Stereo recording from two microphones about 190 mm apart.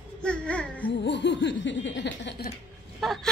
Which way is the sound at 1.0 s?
65° left (ahead or behind).